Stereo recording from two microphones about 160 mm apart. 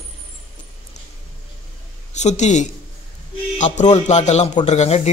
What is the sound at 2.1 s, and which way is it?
A man's voice, 45° left (ahead or behind).